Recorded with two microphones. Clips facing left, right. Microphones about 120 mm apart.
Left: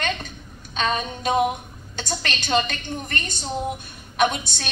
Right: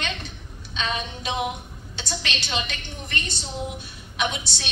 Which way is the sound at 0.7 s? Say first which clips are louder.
Left 5 dB; 45° left (ahead or behind).